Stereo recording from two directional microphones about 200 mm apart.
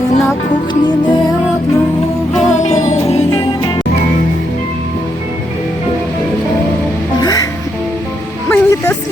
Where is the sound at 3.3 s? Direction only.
20° left (ahead or behind).